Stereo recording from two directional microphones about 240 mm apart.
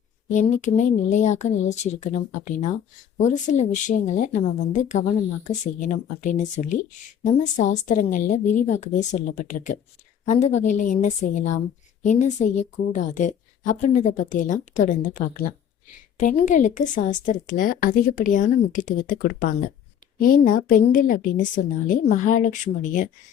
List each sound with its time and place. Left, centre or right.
0.3 s speech: left